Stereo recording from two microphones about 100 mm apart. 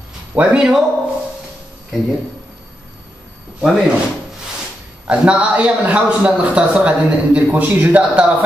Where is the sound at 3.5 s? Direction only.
10° right (ahead or behind).